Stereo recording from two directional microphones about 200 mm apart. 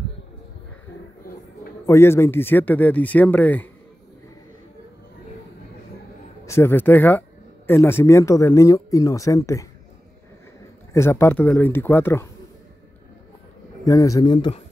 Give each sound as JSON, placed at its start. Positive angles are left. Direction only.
{"t": 1.9, "sound": "speech", "side_deg": 15}
{"t": 6.4, "sound": "speech", "side_deg": 15}
{"t": 10.9, "sound": "speech", "side_deg": 10}
{"t": 13.8, "sound": "speech", "side_deg": 15}